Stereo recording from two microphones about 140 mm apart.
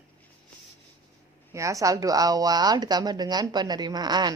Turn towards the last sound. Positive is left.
turn(degrees=-30)  # may be behind; listen again after turning